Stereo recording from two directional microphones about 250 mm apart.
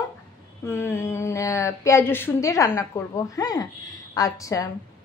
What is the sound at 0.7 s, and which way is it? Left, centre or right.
A woman's voice, centre.